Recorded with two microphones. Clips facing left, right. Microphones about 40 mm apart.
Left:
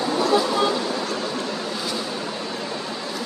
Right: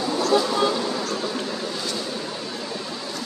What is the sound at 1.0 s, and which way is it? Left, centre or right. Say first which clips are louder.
Vehicle: left 1 dB; centre.